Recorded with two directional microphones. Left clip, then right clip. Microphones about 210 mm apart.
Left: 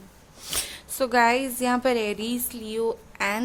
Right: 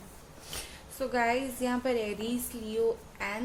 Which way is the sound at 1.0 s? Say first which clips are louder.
Left 8 dB; 50° left (ahead or behind).